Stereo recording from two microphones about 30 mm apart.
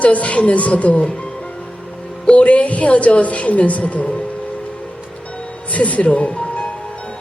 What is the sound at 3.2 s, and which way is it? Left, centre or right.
Music, left.